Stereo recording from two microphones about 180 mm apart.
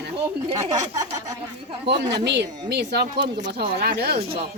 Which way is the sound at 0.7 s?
20° right (ahead or behind).